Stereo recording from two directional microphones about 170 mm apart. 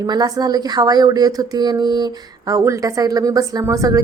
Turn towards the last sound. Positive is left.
turn(degrees=-20)  # may be behind; listen again after turning